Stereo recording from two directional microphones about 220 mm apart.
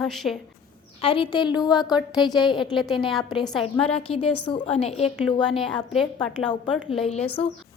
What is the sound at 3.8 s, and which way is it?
A woman's voice, 25° left (ahead or behind).